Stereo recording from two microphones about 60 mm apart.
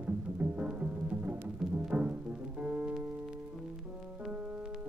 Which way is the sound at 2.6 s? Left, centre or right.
Right.